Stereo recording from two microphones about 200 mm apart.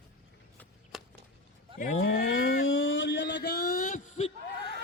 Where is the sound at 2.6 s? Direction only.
75° left (ahead or behind); by 4.3 s 35° left (ahead or behind).